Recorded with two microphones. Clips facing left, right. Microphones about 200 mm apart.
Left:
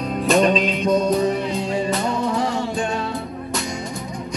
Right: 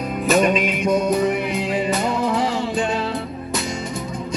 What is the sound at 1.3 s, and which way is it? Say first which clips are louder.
Music: even; 15° right (ahead or behind).